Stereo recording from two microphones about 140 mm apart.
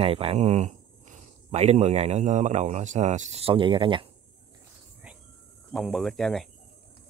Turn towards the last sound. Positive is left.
turn(degrees=0)  # may be behind; listen again after turning